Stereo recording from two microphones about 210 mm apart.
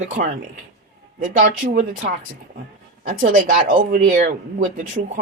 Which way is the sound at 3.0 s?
40° right (ahead or behind).